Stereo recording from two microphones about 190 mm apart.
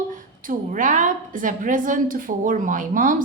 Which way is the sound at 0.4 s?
45° right (ahead or behind).